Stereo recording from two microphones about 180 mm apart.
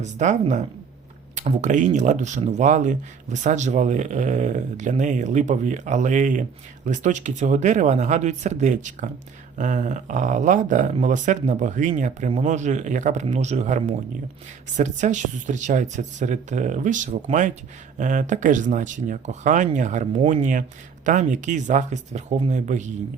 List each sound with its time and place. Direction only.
0.0 s speech: 40° right (ahead or behind)